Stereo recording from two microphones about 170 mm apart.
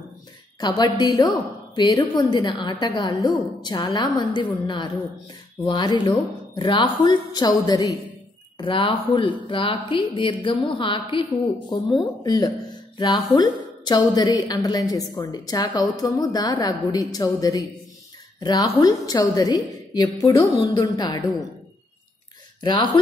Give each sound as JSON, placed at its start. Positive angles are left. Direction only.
{"t": 0.6, "sound": "a woman's voice", "side_deg": 25}
{"t": 22.6, "sound": "speech", "side_deg": 25}